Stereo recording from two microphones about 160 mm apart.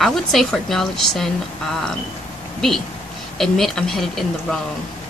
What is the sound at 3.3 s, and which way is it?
A woman's voice, centre (ahead or behind).